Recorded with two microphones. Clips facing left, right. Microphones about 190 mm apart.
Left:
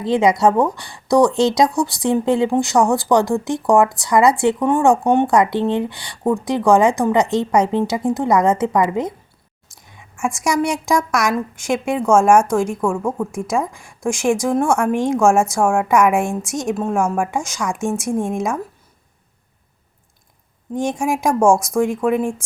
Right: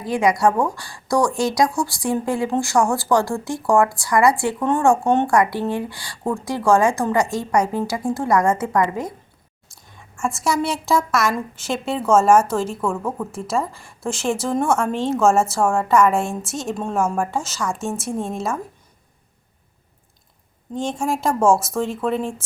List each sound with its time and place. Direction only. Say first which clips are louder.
0.0 s a woman's voice: left 3 dB; 25° left (ahead or behind)
9.7 s a sound: left 1 dB; 15° left (ahead or behind)
10.4 s a woman's voice: left 3 dB; 15° left (ahead or behind)
21.0 s a woman's voice: left 3 dB; 15° left (ahead or behind)